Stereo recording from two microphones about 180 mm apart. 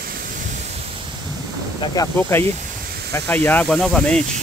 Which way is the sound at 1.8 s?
20° left (ahead or behind).